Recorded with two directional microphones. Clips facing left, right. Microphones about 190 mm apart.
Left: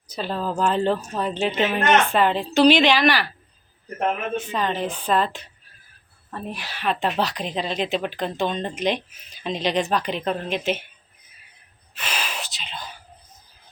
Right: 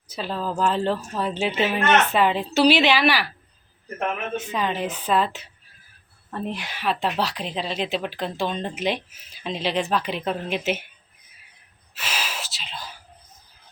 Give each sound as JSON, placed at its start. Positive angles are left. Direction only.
{"t": 0.1, "sound": "a woman's voice", "side_deg": 0}
{"t": 4.5, "sound": "a woman's voice", "side_deg": -10}
{"t": 6.3, "sound": "speech", "side_deg": -20}
{"t": 6.8, "sound": "speech", "side_deg": 0}
{"t": 11.9, "sound": "whispering", "side_deg": -5}